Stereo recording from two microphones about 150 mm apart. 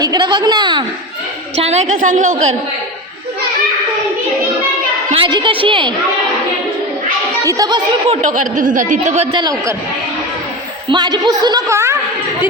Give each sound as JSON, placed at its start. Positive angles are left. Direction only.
{"t": 0.0, "sound": "a woman's voice", "side_deg": -30}
{"t": 1.5, "sound": "a woman's voice", "side_deg": -45}
{"t": 5.1, "sound": "a woman's voice", "side_deg": -35}
{"t": 7.4, "sound": "a woman's voice", "side_deg": -25}
{"t": 8.0, "sound": "a woman's voice", "side_deg": -45}
{"t": 8.3, "sound": "speech", "side_deg": -60}
{"t": 9.3, "sound": "a woman's voice", "side_deg": -25}
{"t": 10.8, "sound": "a woman's voice", "side_deg": -30}